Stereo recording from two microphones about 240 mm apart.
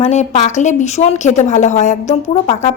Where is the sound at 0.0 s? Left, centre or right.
Left.